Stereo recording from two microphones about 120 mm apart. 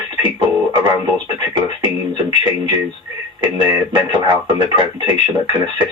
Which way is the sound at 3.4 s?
40° right (ahead or behind).